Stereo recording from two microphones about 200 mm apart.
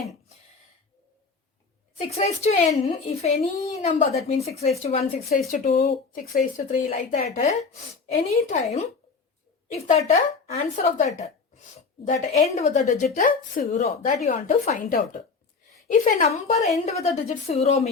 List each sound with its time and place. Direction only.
2.0 s a child's voice: 35° left (ahead or behind)